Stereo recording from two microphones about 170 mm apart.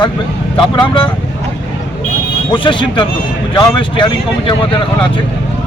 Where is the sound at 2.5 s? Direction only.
30° left (ahead or behind).